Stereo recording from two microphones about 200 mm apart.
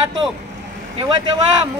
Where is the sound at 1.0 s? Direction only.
25° right (ahead or behind).